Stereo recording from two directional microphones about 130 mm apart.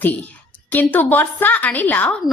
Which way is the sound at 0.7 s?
15° left (ahead or behind).